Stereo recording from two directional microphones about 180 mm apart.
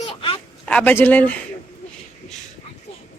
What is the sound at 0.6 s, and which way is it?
Speech, 5° left (ahead or behind).